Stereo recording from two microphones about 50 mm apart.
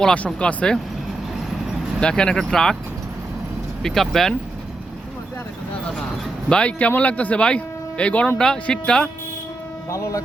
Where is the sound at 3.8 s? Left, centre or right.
Centre.